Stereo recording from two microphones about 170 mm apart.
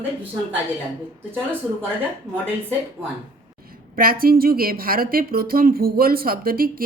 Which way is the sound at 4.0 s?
60° right (ahead or behind).